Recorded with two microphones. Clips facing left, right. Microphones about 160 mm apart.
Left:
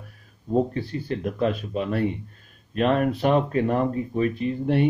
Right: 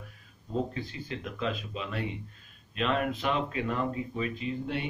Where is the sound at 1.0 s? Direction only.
50° left (ahead or behind).